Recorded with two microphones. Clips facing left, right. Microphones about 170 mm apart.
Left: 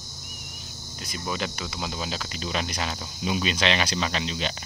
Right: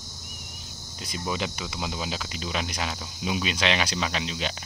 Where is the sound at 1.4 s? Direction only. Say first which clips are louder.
Even; 15° right (ahead or behind).